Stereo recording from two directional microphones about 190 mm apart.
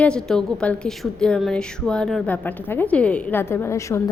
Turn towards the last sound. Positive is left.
turn(degrees=15)  # may be behind; listen again after turning